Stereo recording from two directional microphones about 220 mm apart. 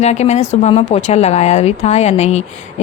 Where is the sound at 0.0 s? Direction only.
30° left (ahead or behind).